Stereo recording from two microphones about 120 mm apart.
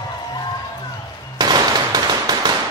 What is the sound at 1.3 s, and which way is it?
Machine gun, 35° right (ahead or behind).